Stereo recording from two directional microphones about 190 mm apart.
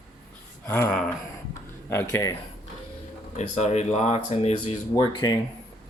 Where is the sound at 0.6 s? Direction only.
10° left (ahead or behind).